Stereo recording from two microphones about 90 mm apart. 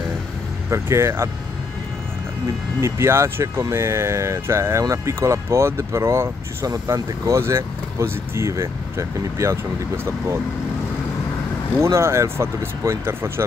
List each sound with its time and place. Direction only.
0.7 s speech: 30° right (ahead or behind)
2.8 s speech: 30° right (ahead or behind)
11.8 s speech: 30° right (ahead or behind)